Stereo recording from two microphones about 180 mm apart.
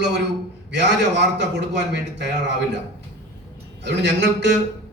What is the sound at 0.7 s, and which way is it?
A man's voice, 75° right (ahead or behind).